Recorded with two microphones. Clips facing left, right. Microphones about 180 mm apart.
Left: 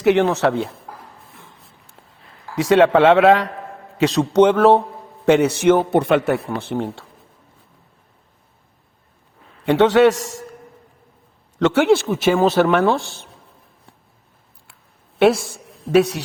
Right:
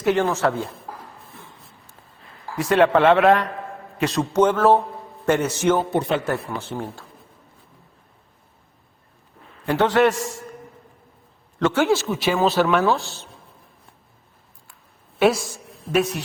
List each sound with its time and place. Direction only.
0.0 s speech: 70° left (ahead or behind)
2.6 s a man's voice: 90° left
4.3 s speech: 70° left (ahead or behind)
9.6 s speech: 90° left
11.5 s speech: 80° left; by 13.2 s 55° left (ahead or behind)
15.5 s a man's voice: 70° left (ahead or behind)